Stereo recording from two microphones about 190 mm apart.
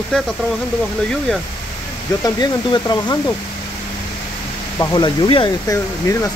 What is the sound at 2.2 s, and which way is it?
Speech, 20° left (ahead or behind).